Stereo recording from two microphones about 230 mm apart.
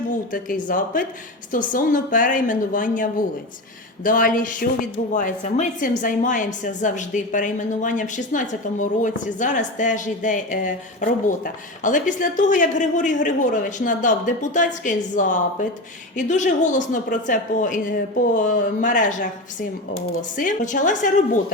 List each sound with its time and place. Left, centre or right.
0.3 s a woman's voice: left
20.3 s a woman's voice: left